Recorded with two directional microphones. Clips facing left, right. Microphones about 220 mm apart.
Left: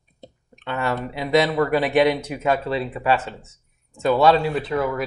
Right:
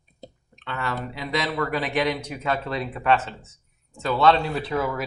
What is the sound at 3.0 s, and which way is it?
Speech, 5° left (ahead or behind).